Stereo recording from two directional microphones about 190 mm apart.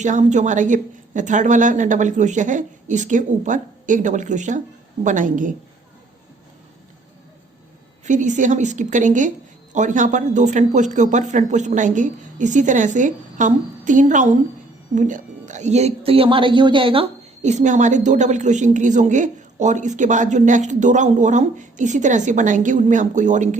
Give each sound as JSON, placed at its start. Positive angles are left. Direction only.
{"t": 0.0, "sound": "a woman's voice", "side_deg": -40}
{"t": 8.0, "sound": "speech", "side_deg": -40}